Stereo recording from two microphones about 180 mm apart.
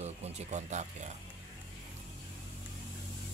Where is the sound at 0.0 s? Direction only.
40° right (ahead or behind).